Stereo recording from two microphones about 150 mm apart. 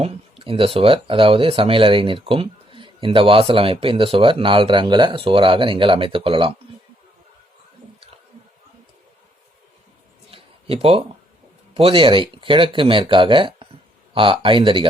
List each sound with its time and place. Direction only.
0.0 s speech: 40° right (ahead or behind)
10.3 s a sound: 40° right (ahead or behind)
11.7 s speech: 35° right (ahead or behind)